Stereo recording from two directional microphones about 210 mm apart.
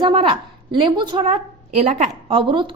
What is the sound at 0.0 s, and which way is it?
Speech, 25° right (ahead or behind).